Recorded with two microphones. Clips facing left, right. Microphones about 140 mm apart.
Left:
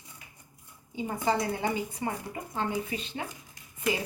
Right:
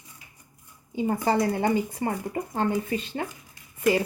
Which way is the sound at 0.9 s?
50° right (ahead or behind).